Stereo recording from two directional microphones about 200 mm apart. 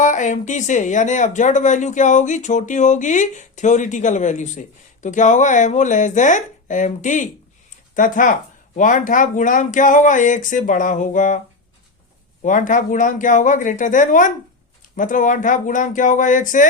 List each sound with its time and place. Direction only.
0.0 s speech: 40° left (ahead or behind)
12.4 s speech: 40° left (ahead or behind)